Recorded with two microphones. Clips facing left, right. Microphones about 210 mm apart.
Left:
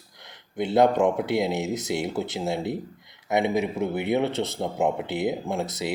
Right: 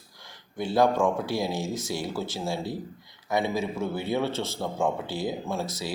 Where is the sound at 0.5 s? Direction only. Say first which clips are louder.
Left 3 dB; 20° left (ahead or behind).